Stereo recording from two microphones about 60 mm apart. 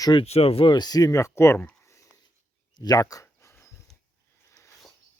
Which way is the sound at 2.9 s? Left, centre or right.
Left.